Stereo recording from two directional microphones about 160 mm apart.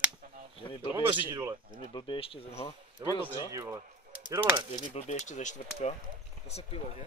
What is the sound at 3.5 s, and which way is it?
Speech, 20° right (ahead or behind).